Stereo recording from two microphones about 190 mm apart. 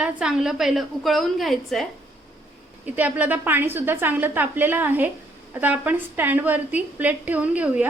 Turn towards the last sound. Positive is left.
turn(degrees=-5)  # may be behind; listen again after turning